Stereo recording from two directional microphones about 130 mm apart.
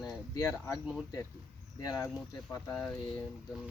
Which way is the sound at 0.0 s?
25° left (ahead or behind).